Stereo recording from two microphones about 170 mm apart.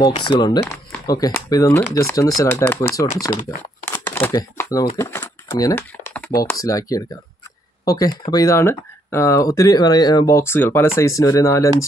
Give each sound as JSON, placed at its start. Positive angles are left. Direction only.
{"t": 0.1, "sound": "speech", "side_deg": 30}
{"t": 3.8, "sound": "crumpling", "side_deg": 10}
{"t": 4.9, "sound": "speech", "side_deg": 15}
{"t": 5.5, "sound": "typing", "side_deg": 20}
{"t": 6.3, "sound": "speech", "side_deg": 20}